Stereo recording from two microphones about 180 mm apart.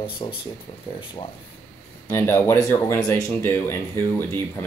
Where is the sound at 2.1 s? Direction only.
15° left (ahead or behind).